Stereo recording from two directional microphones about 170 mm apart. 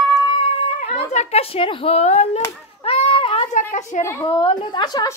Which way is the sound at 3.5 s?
50° left (ahead or behind).